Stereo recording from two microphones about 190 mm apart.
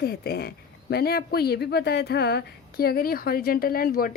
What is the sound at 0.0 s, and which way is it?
Speech, 55° left (ahead or behind).